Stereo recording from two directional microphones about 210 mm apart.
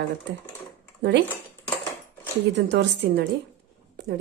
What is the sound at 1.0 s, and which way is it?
Speech, 55° right (ahead or behind).